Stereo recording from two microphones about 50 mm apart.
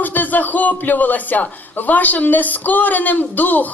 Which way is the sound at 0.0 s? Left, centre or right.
Left.